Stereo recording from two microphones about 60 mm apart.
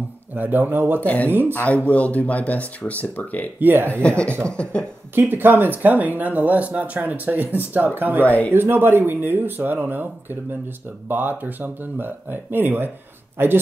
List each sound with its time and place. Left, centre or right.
0.3 s speech: right
1.0 s speech: left
3.5 s speech: right
3.9 s speech: left
5.3 s speech: right
11.1 s speech: right